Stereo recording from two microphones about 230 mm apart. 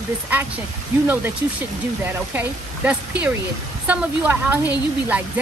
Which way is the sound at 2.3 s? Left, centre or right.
Centre.